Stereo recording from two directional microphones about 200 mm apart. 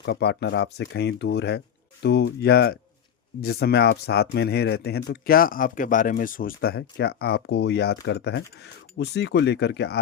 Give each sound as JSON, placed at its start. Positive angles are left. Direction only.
{"t": 0.0, "sound": "speech", "side_deg": 55}